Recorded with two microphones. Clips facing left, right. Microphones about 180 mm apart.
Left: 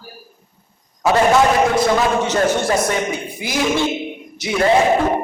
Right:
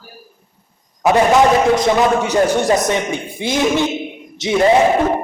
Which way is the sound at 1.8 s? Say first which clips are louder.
Right 2 dB; 15° right (ahead or behind).